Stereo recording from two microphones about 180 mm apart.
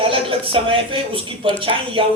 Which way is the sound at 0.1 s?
30° right (ahead or behind).